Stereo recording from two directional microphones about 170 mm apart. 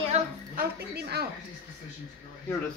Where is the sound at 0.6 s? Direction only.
70° right (ahead or behind).